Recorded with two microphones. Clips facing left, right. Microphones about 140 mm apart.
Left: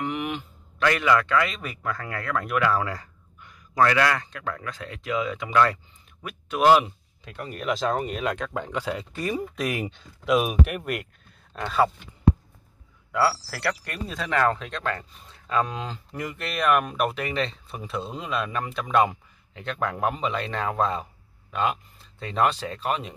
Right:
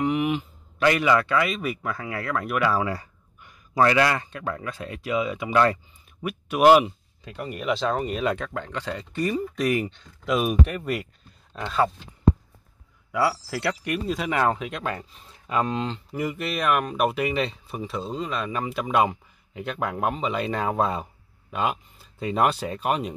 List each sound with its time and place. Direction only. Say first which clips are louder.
0.0 s a man's voice: right 6 dB; 10° right (ahead or behind)
3.7 s a man's voice: right 1 dB; 25° right (ahead or behind)
4.7 s a man's voice: right 2 dB; 15° right (ahead or behind)
8.5 s speech: left 2 dB; 10° left (ahead or behind)
13.1 s a man's voice: even; 15° right (ahead or behind)
15.7 s speech: right 5 dB; centre (ahead or behind)